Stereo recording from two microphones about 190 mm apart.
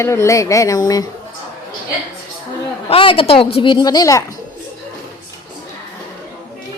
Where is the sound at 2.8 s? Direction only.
30° left (ahead or behind).